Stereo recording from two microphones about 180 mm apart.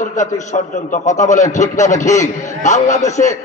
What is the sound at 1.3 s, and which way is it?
A man's voice, 40° left (ahead or behind).